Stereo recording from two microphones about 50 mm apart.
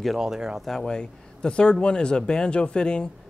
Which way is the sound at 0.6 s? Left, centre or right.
Centre.